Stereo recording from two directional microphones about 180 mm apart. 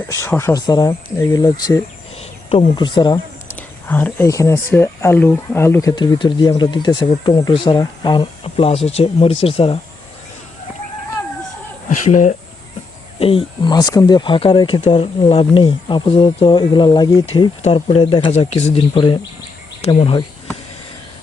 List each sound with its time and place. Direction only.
0.1 s speech: 15° left (ahead or behind)
2.1 s speech: 35° left (ahead or behind)
3.5 s speech: 10° left (ahead or behind)
6.0 s speech: 25° left (ahead or behind)
11.9 s speech: 45° left (ahead or behind)
13.1 s speech: 30° left (ahead or behind)